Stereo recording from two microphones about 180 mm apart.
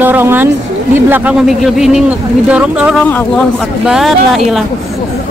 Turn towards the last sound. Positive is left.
turn(degrees=0)  # may be behind; listen again after turning